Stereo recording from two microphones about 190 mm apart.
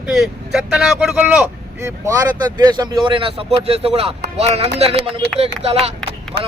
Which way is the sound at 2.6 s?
25° right (ahead or behind).